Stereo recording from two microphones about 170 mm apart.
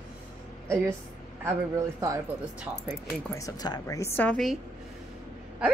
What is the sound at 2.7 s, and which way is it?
Speech, 10° right (ahead or behind).